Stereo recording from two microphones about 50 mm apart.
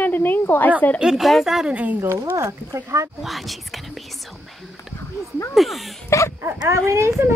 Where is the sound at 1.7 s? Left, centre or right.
Right.